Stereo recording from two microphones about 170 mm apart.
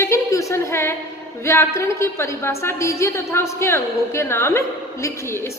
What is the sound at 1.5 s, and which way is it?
A woman's voice, 15° left (ahead or behind).